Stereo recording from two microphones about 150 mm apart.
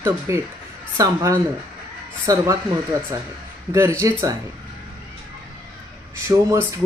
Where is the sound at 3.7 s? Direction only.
20° right (ahead or behind).